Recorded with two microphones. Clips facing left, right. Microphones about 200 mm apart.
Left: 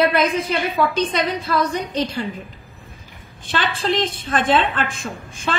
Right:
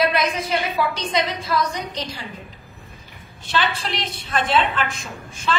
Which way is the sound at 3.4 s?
50° left (ahead or behind).